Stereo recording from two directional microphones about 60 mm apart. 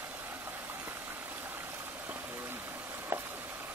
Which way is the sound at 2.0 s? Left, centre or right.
Right.